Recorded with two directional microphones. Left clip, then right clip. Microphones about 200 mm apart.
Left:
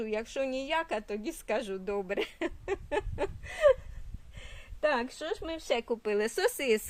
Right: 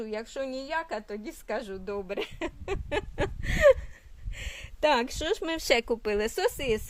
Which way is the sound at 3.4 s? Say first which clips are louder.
Right 4 dB; 35° right (ahead or behind).